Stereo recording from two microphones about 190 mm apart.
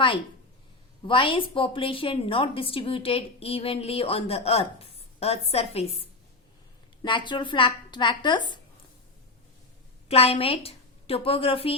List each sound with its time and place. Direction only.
1.0 s a woman's voice: 25° left (ahead or behind)
7.0 s a woman's voice: 25° left (ahead or behind)
10.1 s a woman's voice: 30° left (ahead or behind)